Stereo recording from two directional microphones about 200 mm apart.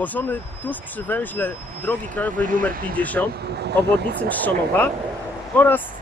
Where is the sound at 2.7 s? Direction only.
45° right (ahead or behind).